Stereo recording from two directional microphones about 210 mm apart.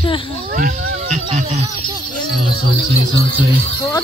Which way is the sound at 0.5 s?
45° right (ahead or behind).